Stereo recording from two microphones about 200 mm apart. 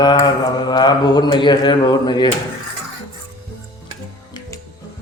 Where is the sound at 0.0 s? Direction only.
20° left (ahead or behind).